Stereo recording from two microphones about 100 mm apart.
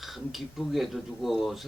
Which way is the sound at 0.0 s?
Centre (ahead or behind).